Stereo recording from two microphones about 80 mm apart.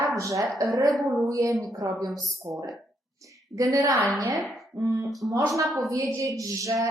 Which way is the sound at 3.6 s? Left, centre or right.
Right.